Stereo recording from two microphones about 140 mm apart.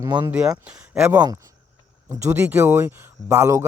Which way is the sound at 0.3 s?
5° right (ahead or behind).